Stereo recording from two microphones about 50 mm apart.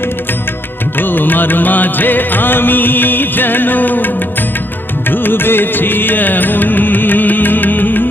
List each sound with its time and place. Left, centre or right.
0.9 s music: left